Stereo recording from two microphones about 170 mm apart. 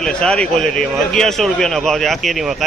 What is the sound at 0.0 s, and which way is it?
A man's voice, 5° left (ahead or behind).